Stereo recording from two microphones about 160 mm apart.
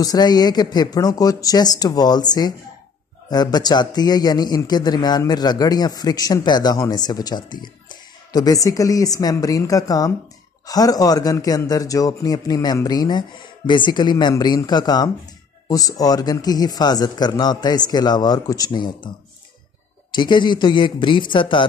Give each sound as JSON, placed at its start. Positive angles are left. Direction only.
{"t": 0.0, "sound": "a man's voice", "side_deg": 25}
{"t": 20.1, "sound": "a man's voice", "side_deg": 30}